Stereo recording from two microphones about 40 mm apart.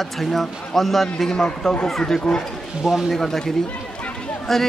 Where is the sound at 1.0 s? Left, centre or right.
Centre.